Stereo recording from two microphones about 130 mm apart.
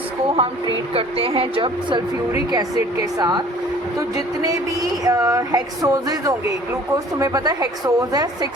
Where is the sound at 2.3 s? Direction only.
30° right (ahead or behind).